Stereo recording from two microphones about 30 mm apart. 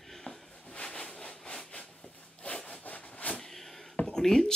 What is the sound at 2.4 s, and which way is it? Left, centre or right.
Sawing, left.